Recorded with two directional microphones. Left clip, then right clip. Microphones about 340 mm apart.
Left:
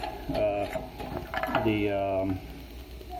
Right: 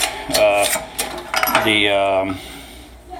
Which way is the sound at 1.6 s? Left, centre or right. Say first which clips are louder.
Right 12 dB; centre.